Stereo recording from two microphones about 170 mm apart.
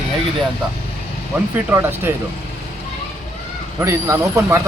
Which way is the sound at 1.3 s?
10° right (ahead or behind).